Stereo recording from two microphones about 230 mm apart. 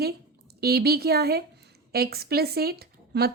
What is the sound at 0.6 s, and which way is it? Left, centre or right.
A woman's voice, right.